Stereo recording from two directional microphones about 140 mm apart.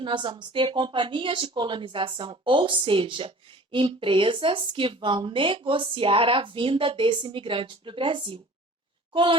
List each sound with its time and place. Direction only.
0.0 s a woman's voice: 35° right (ahead or behind)